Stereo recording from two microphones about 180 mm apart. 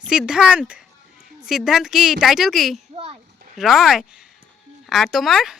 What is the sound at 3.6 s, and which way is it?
Speech, centre (ahead or behind).